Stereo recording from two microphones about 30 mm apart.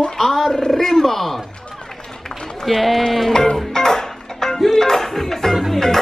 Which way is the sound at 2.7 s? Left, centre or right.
Centre.